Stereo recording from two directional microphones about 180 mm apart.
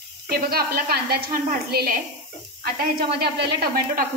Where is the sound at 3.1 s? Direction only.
65° right (ahead or behind).